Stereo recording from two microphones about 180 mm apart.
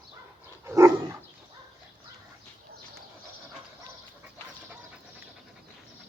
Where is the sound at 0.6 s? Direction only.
15° right (ahead or behind).